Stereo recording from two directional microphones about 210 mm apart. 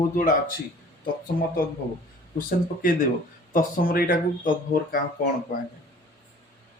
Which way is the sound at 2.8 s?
40° left (ahead or behind).